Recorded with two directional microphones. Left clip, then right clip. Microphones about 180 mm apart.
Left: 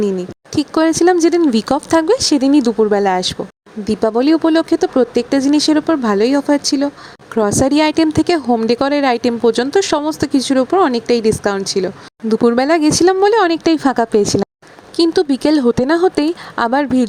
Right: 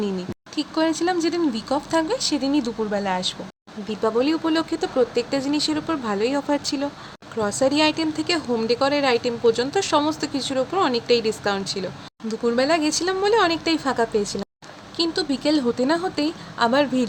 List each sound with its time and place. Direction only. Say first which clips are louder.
0.5 s speech: left 8 dB; 50° left (ahead or behind)
7.3 s speech: left 7 dB; 50° left (ahead or behind)
12.3 s speech: left 8 dB; 50° left (ahead or behind)